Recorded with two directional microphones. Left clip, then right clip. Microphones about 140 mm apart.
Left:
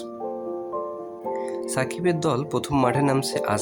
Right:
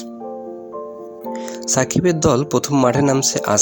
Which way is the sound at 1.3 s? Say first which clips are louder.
Right 6 dB; 45° right (ahead or behind).